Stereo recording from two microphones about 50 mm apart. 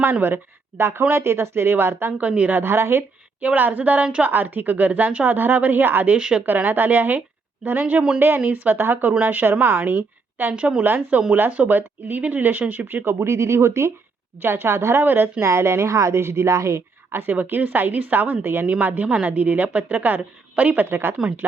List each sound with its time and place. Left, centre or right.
0.0 s speech: right
2.1 s a woman's voice: right
2.6 s speech: right
3.4 s a woman's voice: right
6.1 s a woman's voice: centre
6.4 s a woman's voice: right
13.1 s a woman's voice: right
14.4 s speech: right
15.0 s speech: right
15.4 s a woman's voice: right
17.1 s a woman's voice: right
19.0 s a woman's voice: right
20.9 s speech: right